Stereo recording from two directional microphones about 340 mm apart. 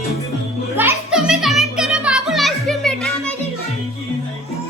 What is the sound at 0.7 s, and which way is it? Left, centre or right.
Music, centre.